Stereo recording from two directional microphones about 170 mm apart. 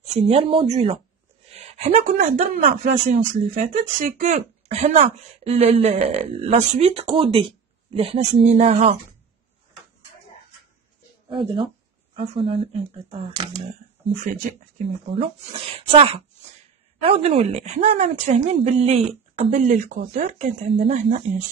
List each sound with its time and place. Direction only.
0.1 s speech: 35° right (ahead or behind)
1.5 s a sound: 35° right (ahead or behind)
2.1 s speech: 40° right (ahead or behind)
11.2 s speech: 30° right (ahead or behind)
14.2 s speech: 50° right (ahead or behind)
15.1 s speech: 35° right (ahead or behind)